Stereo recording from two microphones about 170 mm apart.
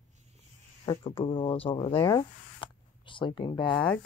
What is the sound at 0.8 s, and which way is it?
Speech, 30° left (ahead or behind).